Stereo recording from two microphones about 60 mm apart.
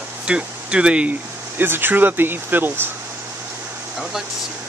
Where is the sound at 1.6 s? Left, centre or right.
Right.